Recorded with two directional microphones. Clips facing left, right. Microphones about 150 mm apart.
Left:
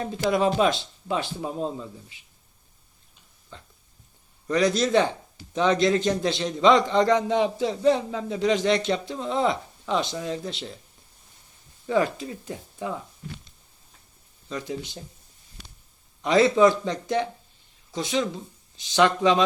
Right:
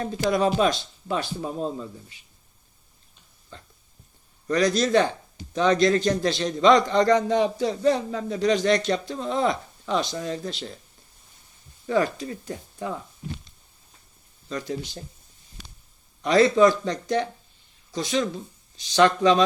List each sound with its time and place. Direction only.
0.0 s a man's voice: 20° left (ahead or behind)
4.4 s a man's voice: 20° left (ahead or behind)
11.9 s a man's voice: 20° left (ahead or behind)
14.5 s a man's voice: 20° left (ahead or behind)
16.2 s a man's voice: 20° left (ahead or behind)